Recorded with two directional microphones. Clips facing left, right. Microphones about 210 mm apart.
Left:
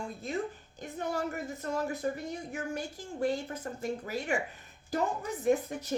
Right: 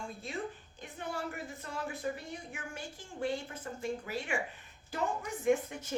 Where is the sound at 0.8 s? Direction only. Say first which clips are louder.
Left 6 dB; 40° left (ahead or behind).